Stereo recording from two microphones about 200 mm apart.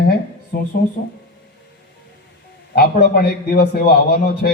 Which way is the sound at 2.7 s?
50° left (ahead or behind).